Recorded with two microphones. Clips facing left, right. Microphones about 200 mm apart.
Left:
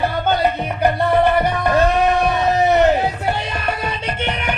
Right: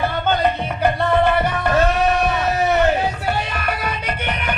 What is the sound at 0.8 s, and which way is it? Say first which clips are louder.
Music: left 2 dB; 15° left (ahead or behind).